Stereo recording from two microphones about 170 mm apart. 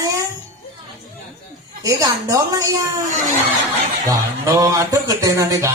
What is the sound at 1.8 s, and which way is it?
Speech, 20° right (ahead or behind).